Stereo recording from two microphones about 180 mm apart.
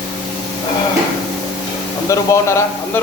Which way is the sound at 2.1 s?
15° left (ahead or behind).